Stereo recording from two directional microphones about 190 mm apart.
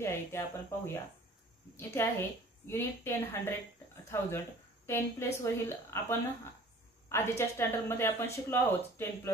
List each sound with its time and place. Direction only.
0.0 s a woman's voice: 15° left (ahead or behind)